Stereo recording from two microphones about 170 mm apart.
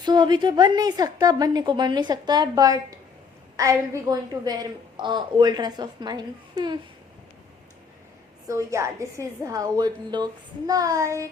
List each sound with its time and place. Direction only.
0.0 s a woman's voice: 25° right (ahead or behind)
8.4 s a woman's voice: 15° right (ahead or behind)